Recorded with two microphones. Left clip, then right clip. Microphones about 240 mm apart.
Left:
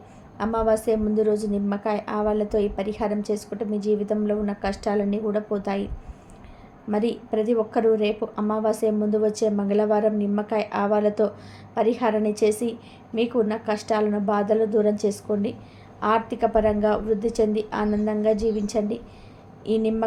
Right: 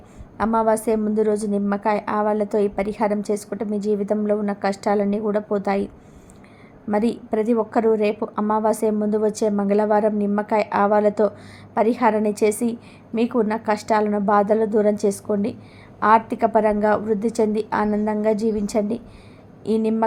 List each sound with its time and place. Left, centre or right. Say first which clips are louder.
0.3 s a woman's voice: right 3 dB; right
6.9 s a woman's voice: right 3 dB; right